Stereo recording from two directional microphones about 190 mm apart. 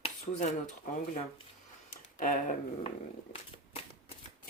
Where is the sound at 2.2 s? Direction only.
45° left (ahead or behind).